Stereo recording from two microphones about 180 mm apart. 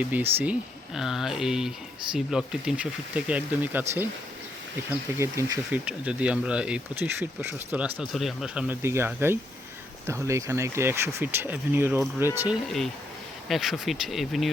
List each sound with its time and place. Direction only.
0.0 s speech: 10° right (ahead or behind)
13.5 s speech: centre (ahead or behind)